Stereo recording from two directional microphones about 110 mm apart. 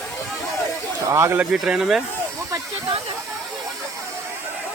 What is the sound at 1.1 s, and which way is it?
Speech, 25° right (ahead or behind).